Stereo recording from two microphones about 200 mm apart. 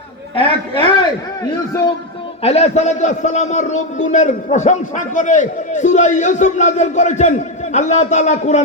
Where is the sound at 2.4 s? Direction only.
35° left (ahead or behind).